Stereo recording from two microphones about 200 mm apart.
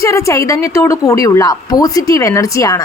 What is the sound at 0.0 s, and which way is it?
A woman's voice, 15° left (ahead or behind).